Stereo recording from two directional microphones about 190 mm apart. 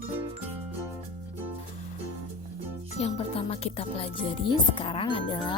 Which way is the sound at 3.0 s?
30° left (ahead or behind).